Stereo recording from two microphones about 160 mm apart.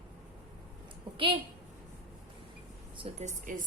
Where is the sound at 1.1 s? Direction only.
30° right (ahead or behind).